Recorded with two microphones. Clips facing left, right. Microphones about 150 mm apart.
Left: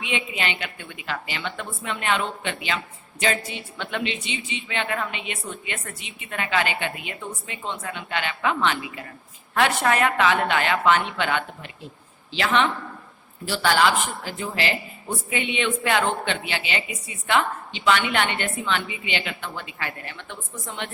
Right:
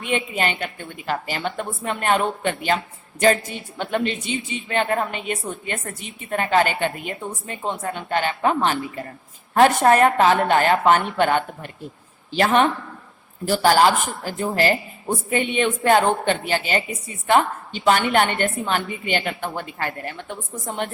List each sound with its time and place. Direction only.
0.0 s a woman's voice: 45° right (ahead or behind)